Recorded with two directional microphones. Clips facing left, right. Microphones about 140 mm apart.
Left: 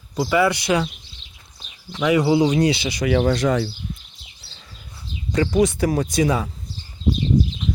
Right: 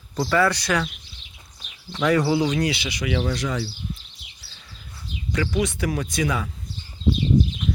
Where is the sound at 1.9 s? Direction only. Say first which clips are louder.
Left 3 dB; 5° left (ahead or behind); by 3.7 s 55° left (ahead or behind).